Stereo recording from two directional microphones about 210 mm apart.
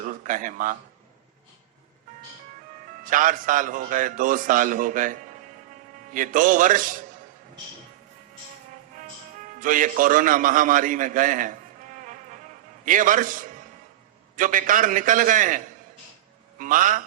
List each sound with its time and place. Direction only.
0.0 s speech: 40° right (ahead or behind)
3.1 s a man's voice: 40° right (ahead or behind)
6.1 s a man's voice: 40° right (ahead or behind)
9.6 s a man's voice: 40° right (ahead or behind)
12.8 s a man's voice: 40° right (ahead or behind)